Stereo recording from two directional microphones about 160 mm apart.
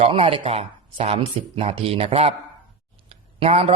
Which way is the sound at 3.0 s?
40° right (ahead or behind).